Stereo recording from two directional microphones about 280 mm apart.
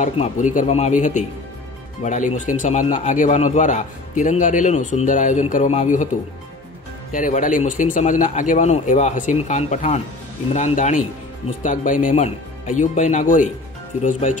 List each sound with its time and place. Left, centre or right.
0.0 s a man's voice: left
7.1 s a man's voice: left